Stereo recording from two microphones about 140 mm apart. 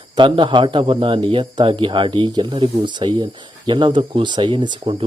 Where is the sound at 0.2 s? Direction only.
35° right (ahead or behind).